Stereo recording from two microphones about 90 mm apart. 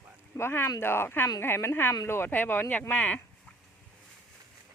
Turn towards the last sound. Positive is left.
turn(degrees=20)  # may be behind; listen again after turning